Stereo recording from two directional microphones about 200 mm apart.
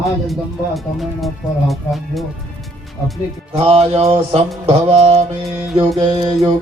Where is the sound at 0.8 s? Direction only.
Centre (ahead or behind).